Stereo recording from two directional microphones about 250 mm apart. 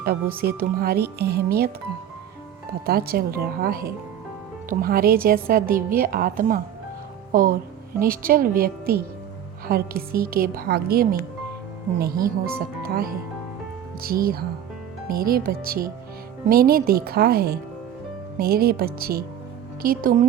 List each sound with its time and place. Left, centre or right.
0.0 s a woman's voice: right
2.8 s a woman's voice: right
7.9 s a woman's voice: right